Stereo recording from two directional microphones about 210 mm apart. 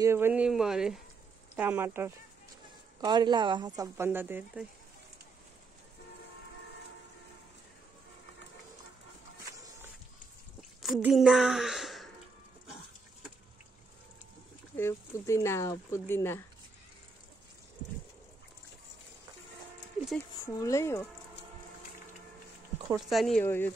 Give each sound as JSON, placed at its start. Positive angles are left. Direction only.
{"t": 0.0, "sound": "speech", "side_deg": -10}
{"t": 3.0, "sound": "speech", "side_deg": -20}
{"t": 10.8, "sound": "speech", "side_deg": -5}
{"t": 14.8, "sound": "speech", "side_deg": 15}
{"t": 20.5, "sound": "speech", "side_deg": 15}
{"t": 22.9, "sound": "speech", "side_deg": 0}
{"t": 23.4, "sound": "speech", "side_deg": 10}